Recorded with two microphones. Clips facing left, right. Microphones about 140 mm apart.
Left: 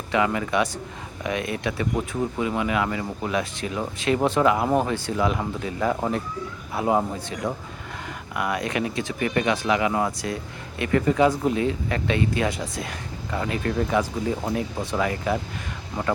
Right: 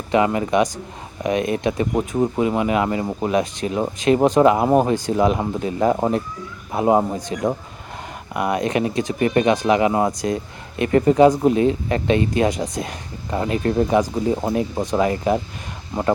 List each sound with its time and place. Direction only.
0.1 s speech: 25° right (ahead or behind)
4.7 s speech: 15° right (ahead or behind)
8.3 s speech: 25° right (ahead or behind)
10.1 s speech: 15° right (ahead or behind)
10.8 s speech: 30° right (ahead or behind)
11.1 s speech: 20° right (ahead or behind)